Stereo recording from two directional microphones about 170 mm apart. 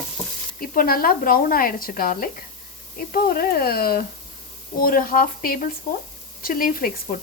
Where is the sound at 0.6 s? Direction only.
60° left (ahead or behind).